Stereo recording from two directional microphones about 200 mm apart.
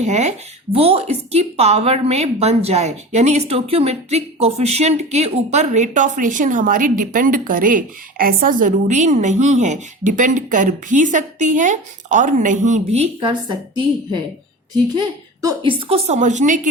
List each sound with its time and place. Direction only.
0.0 s speech: 35° right (ahead or behind)
14.9 s a woman's voice: 20° right (ahead or behind)
15.9 s speech: 30° right (ahead or behind)